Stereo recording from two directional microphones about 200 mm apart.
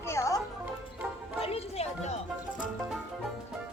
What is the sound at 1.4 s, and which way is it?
Music, 30° left (ahead or behind).